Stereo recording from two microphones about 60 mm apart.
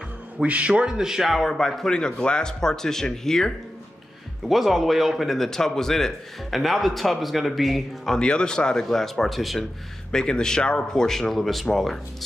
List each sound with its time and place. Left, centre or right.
0.4 s a man's voice: right; by 9.7 s centre
10.1 s speech: centre